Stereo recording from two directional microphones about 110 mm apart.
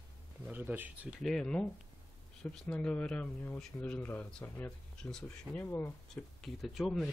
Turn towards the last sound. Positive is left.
turn(degrees=0)  # may be behind; listen again after turning